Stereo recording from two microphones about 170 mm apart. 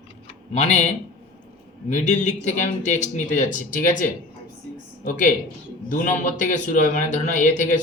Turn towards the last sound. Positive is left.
turn(degrees=50)  # may be behind; listen again after turning